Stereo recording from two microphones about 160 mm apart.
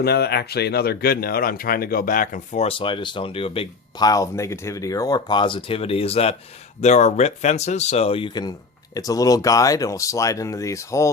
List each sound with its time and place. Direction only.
0.0 s speech: 90° left; by 2.6 s 55° left (ahead or behind)
2.6 s speech: 30° left (ahead or behind)